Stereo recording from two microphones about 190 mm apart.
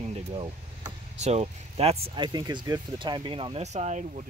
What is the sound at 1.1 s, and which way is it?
Speech, 35° right (ahead or behind).